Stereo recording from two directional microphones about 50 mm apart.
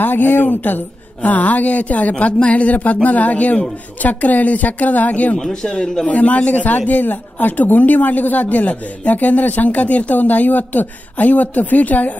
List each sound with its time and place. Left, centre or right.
0.0 s speech: left
5.4 s a man's voice: centre
6.0 s a man's voice: left